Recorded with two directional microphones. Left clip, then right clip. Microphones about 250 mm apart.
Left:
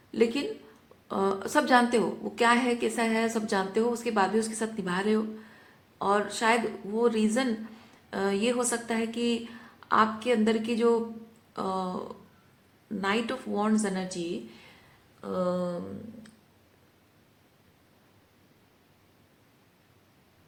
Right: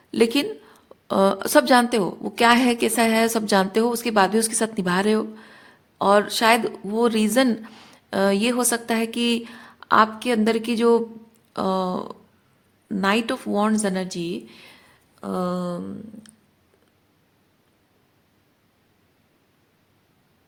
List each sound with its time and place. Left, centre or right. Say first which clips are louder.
0.1 s a woman's voice: right 6 dB; right